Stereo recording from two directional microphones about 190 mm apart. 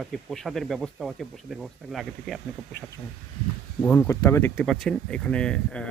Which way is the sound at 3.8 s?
5° left (ahead or behind).